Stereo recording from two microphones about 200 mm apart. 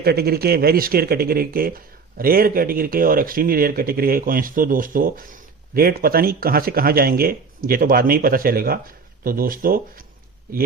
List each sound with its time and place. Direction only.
0.0 s speech: 50° right (ahead or behind)